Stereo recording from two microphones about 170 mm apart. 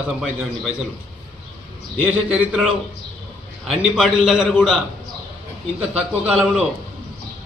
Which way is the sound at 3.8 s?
Centre (ahead or behind).